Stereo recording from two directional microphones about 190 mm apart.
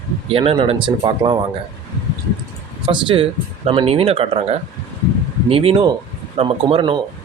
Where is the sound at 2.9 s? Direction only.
25° right (ahead or behind).